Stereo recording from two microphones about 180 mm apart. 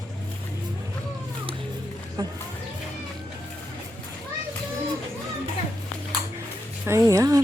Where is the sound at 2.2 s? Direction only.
25° right (ahead or behind).